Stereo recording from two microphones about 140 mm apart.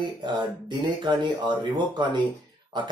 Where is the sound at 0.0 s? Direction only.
30° right (ahead or behind).